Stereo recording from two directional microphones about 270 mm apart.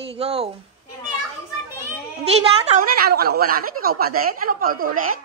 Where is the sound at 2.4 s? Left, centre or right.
Right.